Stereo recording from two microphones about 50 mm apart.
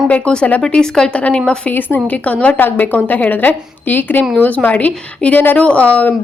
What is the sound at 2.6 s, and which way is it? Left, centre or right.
A woman's voice, left.